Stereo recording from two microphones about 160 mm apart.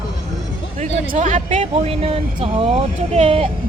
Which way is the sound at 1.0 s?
50° right (ahead or behind).